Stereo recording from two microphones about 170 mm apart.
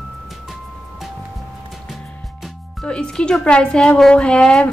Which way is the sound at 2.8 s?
5° left (ahead or behind).